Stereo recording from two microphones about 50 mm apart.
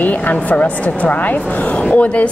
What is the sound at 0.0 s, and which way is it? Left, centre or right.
A woman's voice, left.